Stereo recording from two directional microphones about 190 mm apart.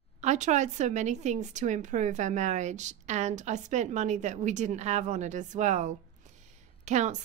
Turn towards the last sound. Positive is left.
turn(degrees=-40)  # may be behind; listen again after turning